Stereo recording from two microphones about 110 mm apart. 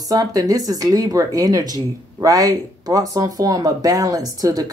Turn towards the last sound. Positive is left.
turn(degrees=-35)  # may be behind; listen again after turning